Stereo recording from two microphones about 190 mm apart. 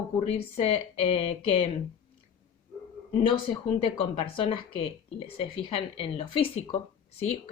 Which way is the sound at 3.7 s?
30° left (ahead or behind).